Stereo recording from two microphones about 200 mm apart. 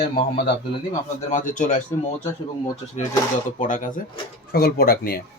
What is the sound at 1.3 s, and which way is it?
Speech, 35° left (ahead or behind).